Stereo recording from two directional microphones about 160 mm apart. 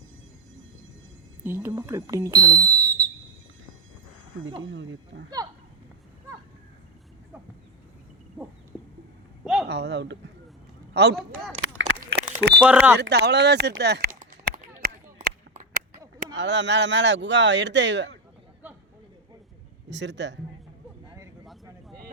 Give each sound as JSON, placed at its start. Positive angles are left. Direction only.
{"t": 1.5, "sound": "speech", "side_deg": -15}
{"t": 4.7, "sound": "speech", "side_deg": -90}
{"t": 9.4, "sound": "a sound", "side_deg": -5}
{"t": 9.6, "sound": "speech", "side_deg": -90}
{"t": 12.1, "sound": "a sound", "side_deg": -75}
{"t": 12.6, "sound": "speech", "side_deg": -10}
{"t": 13.0, "sound": "speech", "side_deg": -90}
{"t": 14.2, "sound": "a sound", "side_deg": -55}
{"t": 15.5, "sound": "whip", "side_deg": -50}
{"t": 16.4, "sound": "speech", "side_deg": -90}
{"t": 19.9, "sound": "speech", "side_deg": -90}
{"t": 21.4, "sound": "vehicle", "side_deg": 0}